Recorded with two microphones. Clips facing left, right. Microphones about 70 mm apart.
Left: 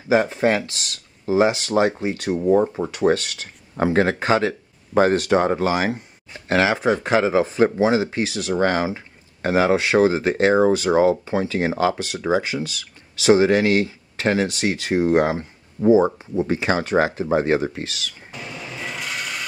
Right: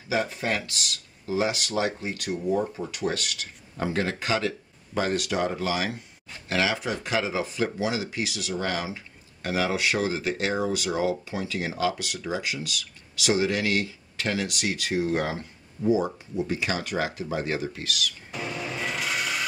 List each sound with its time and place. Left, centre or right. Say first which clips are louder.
0.1 s speech: left 9 dB; left
15.8 s speech: left 8 dB; left
16.3 s speech: left 7 dB; left
18.3 s a sound: right 2 dB; centre